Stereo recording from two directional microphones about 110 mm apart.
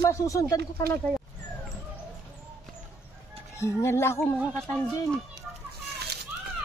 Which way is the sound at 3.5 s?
25° left (ahead or behind).